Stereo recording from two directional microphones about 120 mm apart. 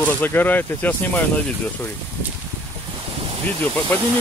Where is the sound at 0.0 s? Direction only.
15° left (ahead or behind).